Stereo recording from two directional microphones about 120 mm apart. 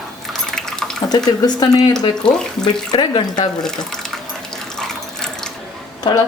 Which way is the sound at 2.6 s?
40° left (ahead or behind).